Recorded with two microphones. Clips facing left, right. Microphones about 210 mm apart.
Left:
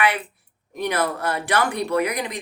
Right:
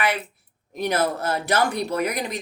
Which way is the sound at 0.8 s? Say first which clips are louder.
Right 1 dB; 45° right (ahead or behind).